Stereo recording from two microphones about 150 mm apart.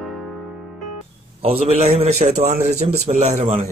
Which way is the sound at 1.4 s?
40° right (ahead or behind).